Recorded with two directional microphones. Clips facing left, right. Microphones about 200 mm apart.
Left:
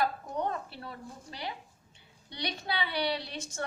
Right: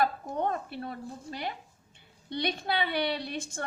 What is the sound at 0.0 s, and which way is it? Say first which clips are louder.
A woman's voice: right 3 dB; 50° right (ahead or behind).